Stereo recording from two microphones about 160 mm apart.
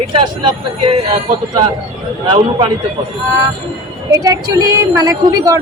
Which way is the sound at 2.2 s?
30° right (ahead or behind).